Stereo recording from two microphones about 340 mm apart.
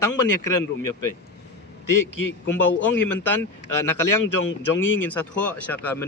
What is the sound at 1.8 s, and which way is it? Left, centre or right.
Speech, left.